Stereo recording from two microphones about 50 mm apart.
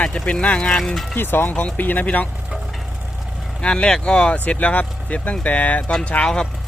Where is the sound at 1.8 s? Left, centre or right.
Left.